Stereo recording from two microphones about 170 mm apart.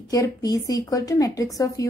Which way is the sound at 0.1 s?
20° left (ahead or behind).